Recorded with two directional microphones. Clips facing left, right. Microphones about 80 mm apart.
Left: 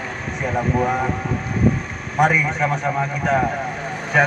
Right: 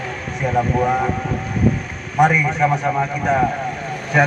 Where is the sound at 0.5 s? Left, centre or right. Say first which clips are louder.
Right 2 dB; centre.